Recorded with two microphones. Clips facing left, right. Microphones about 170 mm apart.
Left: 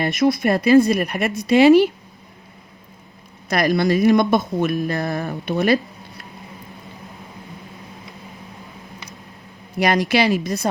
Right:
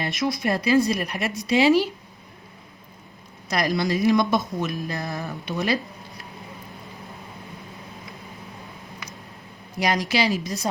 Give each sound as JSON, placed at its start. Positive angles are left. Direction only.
{"t": 0.3, "sound": "speech", "side_deg": 60}
{"t": 3.5, "sound": "speech", "side_deg": 60}
{"t": 9.7, "sound": "speech", "side_deg": 60}